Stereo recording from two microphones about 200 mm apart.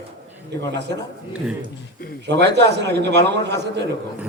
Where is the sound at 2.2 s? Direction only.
55° right (ahead or behind).